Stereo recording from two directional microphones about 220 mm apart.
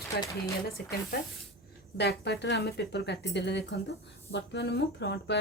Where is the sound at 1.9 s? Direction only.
50° left (ahead or behind).